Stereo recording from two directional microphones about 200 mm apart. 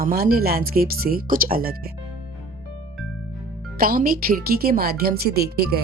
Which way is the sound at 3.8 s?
45° right (ahead or behind).